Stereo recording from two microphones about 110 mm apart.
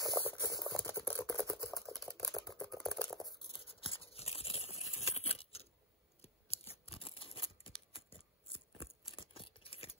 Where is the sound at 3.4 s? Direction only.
55° left (ahead or behind).